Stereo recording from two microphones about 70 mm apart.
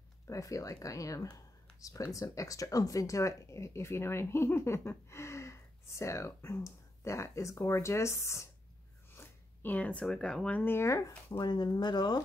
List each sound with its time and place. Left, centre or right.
0.3 s speech: left
9.1 s zipper: left
10.0 s speech: centre
10.6 s speech: left
10.9 s speech: left
11.4 s speech: left